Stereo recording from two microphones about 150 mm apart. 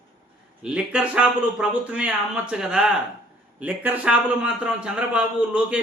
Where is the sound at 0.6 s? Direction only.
5° right (ahead or behind).